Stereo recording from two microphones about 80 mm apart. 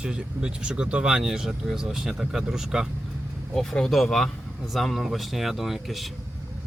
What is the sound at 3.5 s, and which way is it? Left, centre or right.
Speech, centre.